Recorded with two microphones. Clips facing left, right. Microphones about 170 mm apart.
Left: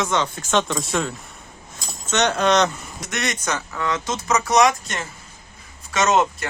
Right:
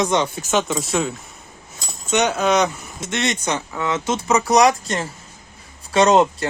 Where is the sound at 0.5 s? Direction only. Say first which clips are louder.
Right 1 dB; 5° right (ahead or behind).